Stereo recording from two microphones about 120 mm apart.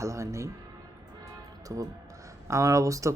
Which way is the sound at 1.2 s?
30° right (ahead or behind).